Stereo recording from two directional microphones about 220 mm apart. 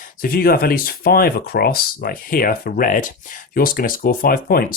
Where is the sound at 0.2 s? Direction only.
40° left (ahead or behind).